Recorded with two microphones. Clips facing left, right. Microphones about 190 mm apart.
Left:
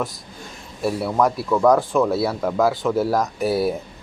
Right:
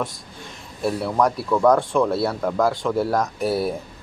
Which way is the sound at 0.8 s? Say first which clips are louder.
Left 1 dB; 5° left (ahead or behind).